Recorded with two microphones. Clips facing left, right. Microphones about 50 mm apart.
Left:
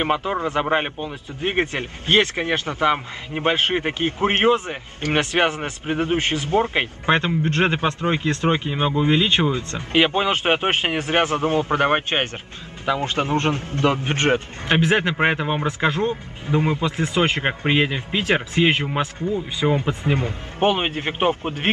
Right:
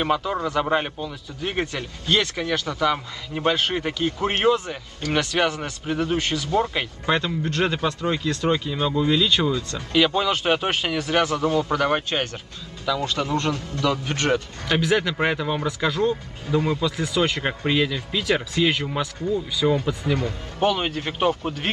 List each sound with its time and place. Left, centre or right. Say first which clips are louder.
0.0 s a man's voice: left 1 dB; left